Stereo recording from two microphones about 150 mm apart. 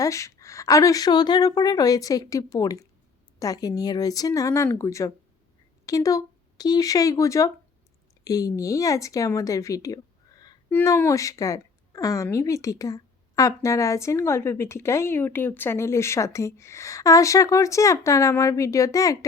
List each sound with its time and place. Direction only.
0.0 s a woman's voice: 20° left (ahead or behind)